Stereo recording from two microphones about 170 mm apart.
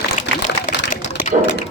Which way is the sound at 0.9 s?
45° left (ahead or behind).